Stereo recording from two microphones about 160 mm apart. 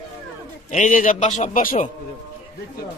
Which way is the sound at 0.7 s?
50° left (ahead or behind).